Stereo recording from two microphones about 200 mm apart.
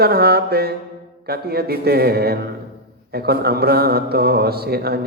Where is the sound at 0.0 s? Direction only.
50° right (ahead or behind).